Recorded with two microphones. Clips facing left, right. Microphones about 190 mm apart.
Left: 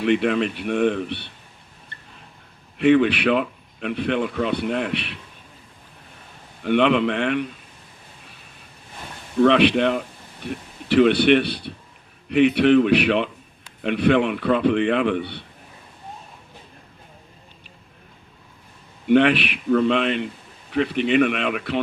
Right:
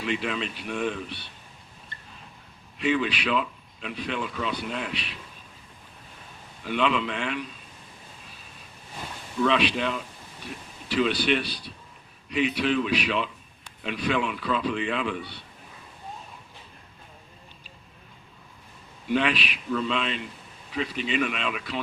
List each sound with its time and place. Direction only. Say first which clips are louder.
0.0 s a man's voice: left 10 dB; 65° left (ahead or behind)
2.7 s a man's voice: left 9 dB; 60° left (ahead or behind)
6.6 s a man's voice: left 8 dB; 65° left (ahead or behind)
9.4 s a man's voice: left 8 dB; 60° left (ahead or behind)
19.0 s a man's voice: left 9 dB; 65° left (ahead or behind)